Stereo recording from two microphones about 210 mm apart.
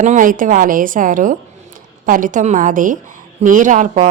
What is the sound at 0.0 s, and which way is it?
A woman's voice, 40° right (ahead or behind).